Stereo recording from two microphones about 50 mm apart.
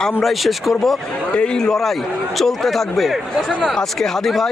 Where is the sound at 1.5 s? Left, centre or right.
Centre.